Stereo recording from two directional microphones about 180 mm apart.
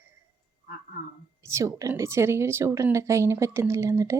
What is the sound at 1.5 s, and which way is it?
A woman's voice, 15° right (ahead or behind).